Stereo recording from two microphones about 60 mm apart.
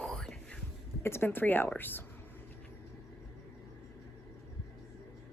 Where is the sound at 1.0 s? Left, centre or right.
Left.